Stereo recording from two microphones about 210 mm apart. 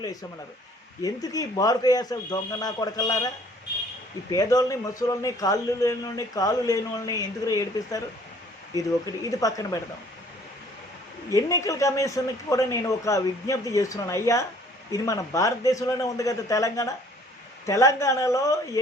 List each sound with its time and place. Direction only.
0.0 s a man's voice: 20° left (ahead or behind)
9.3 s a man's voice: 15° left (ahead or behind)
11.3 s a man's voice: 15° left (ahead or behind)